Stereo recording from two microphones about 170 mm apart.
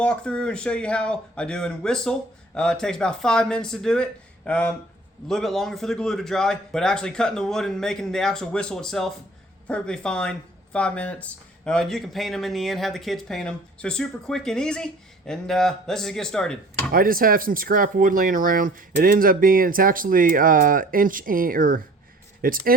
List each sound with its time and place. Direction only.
0.0 s speech: 5° left (ahead or behind)
16.9 s speech: 55° right (ahead or behind)